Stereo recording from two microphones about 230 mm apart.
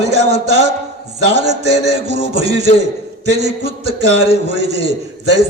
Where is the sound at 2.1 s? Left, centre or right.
Right.